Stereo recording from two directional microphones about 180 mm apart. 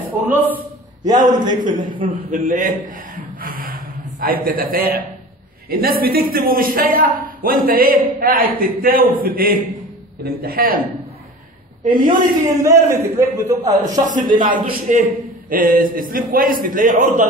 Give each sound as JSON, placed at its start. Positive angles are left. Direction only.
{"t": 1.2, "sound": "a man's voice", "side_deg": -25}
{"t": 1.6, "sound": "a man's voice", "side_deg": -50}
{"t": 12.6, "sound": "a man's voice", "side_deg": -15}
{"t": 14.0, "sound": "a man's voice", "side_deg": -45}